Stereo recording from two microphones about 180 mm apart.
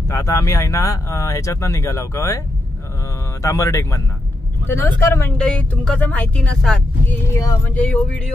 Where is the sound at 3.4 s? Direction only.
15° left (ahead or behind).